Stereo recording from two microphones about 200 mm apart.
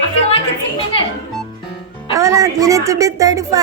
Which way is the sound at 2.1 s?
15° right (ahead or behind).